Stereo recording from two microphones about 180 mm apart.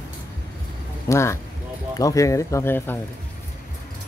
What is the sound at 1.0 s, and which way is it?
Speech, 15° left (ahead or behind).